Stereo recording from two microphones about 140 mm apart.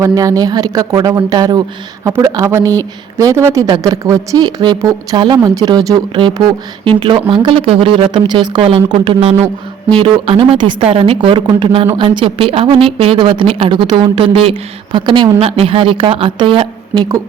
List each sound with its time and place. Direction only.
0.0 s speech: 25° right (ahead or behind)